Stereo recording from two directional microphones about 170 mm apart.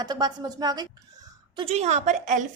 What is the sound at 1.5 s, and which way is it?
Speech, 35° right (ahead or behind).